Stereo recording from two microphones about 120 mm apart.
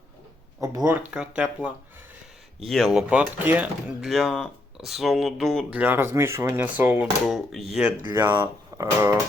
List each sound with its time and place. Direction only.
0.6 s speech: 25° right (ahead or behind)
0.9 s speech: 10° right (ahead or behind)
2.6 s speech: centre (ahead or behind)
5.7 s speech: 15° right (ahead or behind)
7.3 s speech: centre (ahead or behind)
8.2 s speech: 15° right (ahead or behind)